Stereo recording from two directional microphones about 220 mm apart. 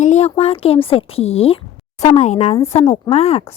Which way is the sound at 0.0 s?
30° left (ahead or behind).